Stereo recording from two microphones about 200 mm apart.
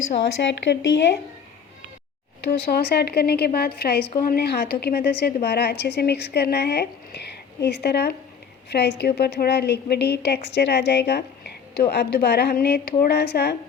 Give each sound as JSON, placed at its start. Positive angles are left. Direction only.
{"t": 0.1, "sound": "a woman's voice", "side_deg": 60}
{"t": 2.4, "sound": "a woman's voice", "side_deg": 50}